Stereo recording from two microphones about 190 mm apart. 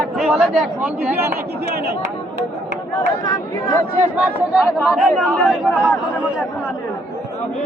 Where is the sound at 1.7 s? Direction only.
55° right (ahead or behind).